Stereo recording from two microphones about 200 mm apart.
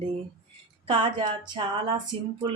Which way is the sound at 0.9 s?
25° right (ahead or behind).